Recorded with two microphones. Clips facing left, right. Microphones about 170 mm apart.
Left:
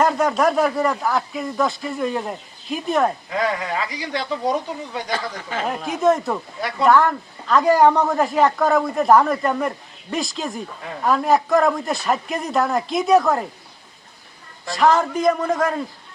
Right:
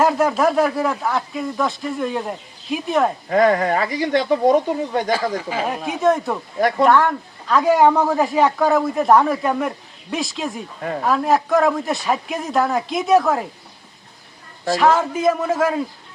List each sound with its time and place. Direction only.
0.0 s speech: 5° right (ahead or behind)
3.2 s speech: 45° right (ahead or behind)
5.1 s speech: 10° right (ahead or behind)
6.6 s speech: 45° right (ahead or behind)
6.8 s speech: centre (ahead or behind)
14.8 s speech: centre (ahead or behind)